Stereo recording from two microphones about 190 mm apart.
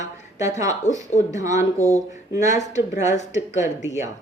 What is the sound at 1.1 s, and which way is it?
Speech, 40° left (ahead or behind).